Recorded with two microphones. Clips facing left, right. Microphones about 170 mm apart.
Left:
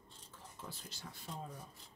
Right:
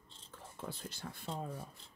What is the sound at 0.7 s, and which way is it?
Speech, 55° right (ahead or behind).